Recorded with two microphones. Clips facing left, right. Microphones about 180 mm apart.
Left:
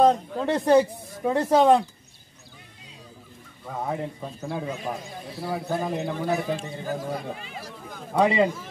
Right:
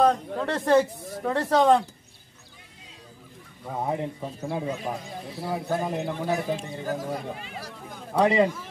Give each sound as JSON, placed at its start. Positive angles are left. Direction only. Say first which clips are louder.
{"t": 0.0, "sound": "speech", "louder": "left 2 dB", "side_deg": 20}
{"t": 3.7, "sound": "a man's voice", "louder": "right 1 dB", "side_deg": -15}
{"t": 8.1, "sound": "speech", "louder": "even", "side_deg": 5}